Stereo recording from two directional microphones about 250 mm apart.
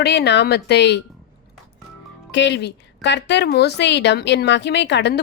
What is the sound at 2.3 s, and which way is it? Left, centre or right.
A woman's voice, left.